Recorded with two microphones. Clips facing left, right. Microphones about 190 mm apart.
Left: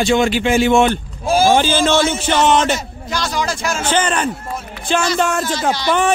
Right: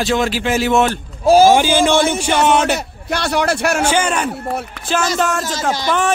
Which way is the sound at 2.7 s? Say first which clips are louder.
Right 2 dB; 60° right (ahead or behind).